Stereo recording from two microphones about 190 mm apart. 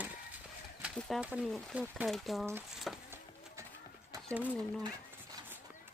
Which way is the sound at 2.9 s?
Centre (ahead or behind).